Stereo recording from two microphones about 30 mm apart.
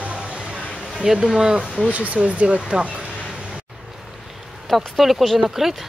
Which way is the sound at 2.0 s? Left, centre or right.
Right.